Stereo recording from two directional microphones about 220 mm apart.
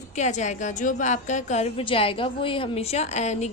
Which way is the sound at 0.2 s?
30° left (ahead or behind).